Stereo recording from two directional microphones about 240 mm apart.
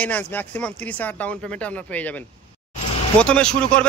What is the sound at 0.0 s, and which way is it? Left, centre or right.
A man's voice, centre.